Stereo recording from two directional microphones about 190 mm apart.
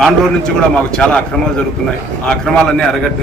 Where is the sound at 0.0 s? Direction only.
5° left (ahead or behind).